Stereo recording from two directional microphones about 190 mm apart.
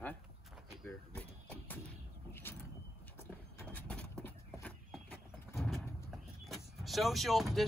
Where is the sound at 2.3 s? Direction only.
10° left (ahead or behind).